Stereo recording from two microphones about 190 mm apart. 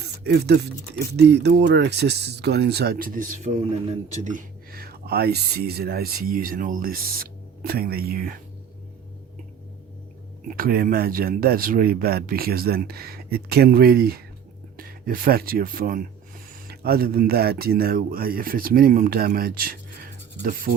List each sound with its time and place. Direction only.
0.0 s speech: 60° right (ahead or behind)
10.5 s speech: 50° right (ahead or behind)